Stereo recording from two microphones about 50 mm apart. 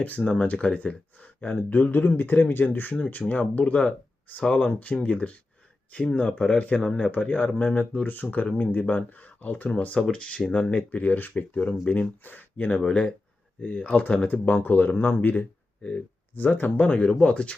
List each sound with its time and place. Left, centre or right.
0.0 s speech: left
9.7 s speech: left
12.8 s speech: left
14.4 s speech: left
15.8 s speech: left
16.3 s speech: left
16.7 s speech: left